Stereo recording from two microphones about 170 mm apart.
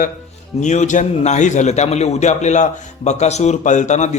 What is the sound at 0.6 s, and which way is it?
A man's voice, 45° left (ahead or behind).